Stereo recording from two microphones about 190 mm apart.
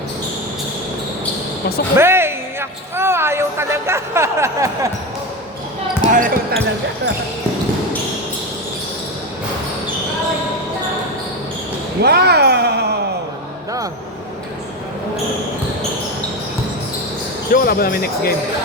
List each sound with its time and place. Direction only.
2.0 s a man's voice: 10° right (ahead or behind)
6.1 s basketball bounce: 45° right (ahead or behind)
12.0 s a sound: 60° right (ahead or behind)
17.5 s speech: 50° left (ahead or behind)